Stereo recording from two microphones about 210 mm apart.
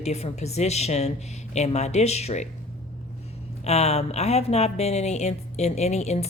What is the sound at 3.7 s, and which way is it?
Speech, 30° left (ahead or behind).